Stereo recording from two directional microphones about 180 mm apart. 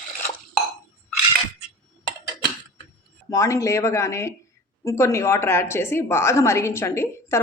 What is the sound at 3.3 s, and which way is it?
A woman's voice, 15° left (ahead or behind).